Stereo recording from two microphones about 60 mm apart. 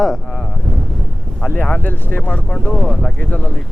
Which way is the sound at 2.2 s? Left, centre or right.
Centre.